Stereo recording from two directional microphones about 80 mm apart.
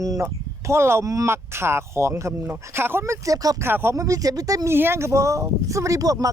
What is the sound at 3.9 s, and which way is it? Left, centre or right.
Speech, right.